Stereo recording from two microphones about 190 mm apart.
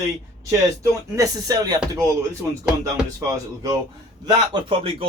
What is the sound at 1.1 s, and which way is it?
Speech, 20° right (ahead or behind).